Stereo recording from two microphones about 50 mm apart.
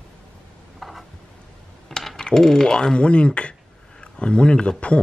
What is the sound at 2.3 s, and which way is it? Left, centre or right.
Speech, centre.